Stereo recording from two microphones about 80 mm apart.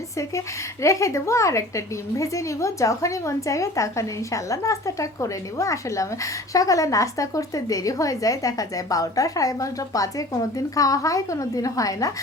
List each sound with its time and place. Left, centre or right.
0.2 s a woman's voice: left